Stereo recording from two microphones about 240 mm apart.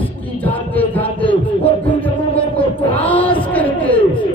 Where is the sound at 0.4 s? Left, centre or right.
Centre.